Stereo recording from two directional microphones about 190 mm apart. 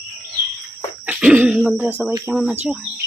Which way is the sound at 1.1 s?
5° right (ahead or behind).